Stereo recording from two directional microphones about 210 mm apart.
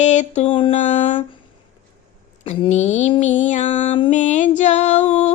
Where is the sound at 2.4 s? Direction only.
30° left (ahead or behind).